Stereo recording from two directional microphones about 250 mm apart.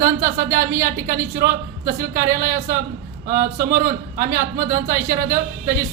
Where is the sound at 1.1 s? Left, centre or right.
Right.